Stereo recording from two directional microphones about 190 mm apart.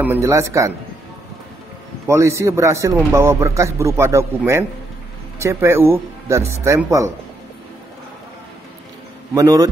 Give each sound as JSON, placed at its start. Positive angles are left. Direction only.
{"t": 0.0, "sound": "a man's voice", "side_deg": -15}
{"t": 2.0, "sound": "a man's voice", "side_deg": -15}
{"t": 9.3, "sound": "a man's voice", "side_deg": -20}